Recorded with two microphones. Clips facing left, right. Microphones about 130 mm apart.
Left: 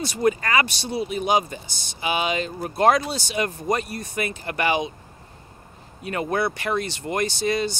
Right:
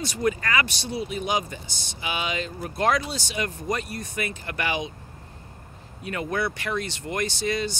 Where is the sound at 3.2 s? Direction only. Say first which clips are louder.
Left 4 dB; 40° left (ahead or behind).